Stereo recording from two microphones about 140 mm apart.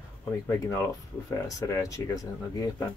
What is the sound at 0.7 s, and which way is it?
Speech, 20° left (ahead or behind).